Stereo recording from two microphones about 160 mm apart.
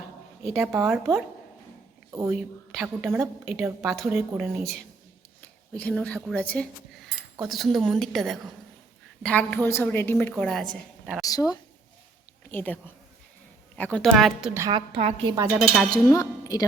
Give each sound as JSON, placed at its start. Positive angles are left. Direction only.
{"t": 0.4, "sound": "speech", "side_deg": 0}
{"t": 2.7, "sound": "a woman's voice", "side_deg": -5}
{"t": 3.9, "sound": "speech", "side_deg": 0}
{"t": 5.4, "sound": "a woman's voice", "side_deg": 10}
{"t": 11.3, "sound": "speech", "side_deg": 25}
{"t": 12.5, "sound": "a woman's voice", "side_deg": 10}
{"t": 14.7, "sound": "a woman's voice", "side_deg": -35}
{"t": 15.5, "sound": "speech", "side_deg": 0}
{"t": 15.9, "sound": "a woman's voice", "side_deg": 20}